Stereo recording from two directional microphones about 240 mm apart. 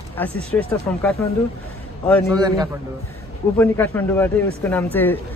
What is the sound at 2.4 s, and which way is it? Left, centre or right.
Speech, centre.